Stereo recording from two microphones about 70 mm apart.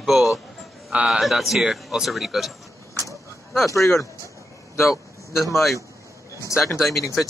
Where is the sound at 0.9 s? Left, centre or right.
Centre.